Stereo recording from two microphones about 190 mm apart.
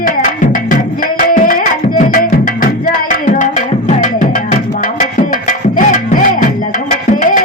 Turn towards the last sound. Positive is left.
turn(degrees=45)  # may be behind; listen again after turning